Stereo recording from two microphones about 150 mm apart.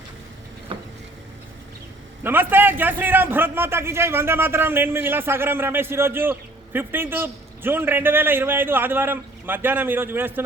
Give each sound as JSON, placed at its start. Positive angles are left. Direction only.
{"t": 0.7, "sound": "vehicle", "side_deg": -40}
{"t": 2.2, "sound": "a man's voice", "side_deg": -15}